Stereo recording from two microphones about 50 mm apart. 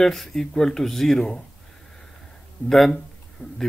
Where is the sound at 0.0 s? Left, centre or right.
Centre.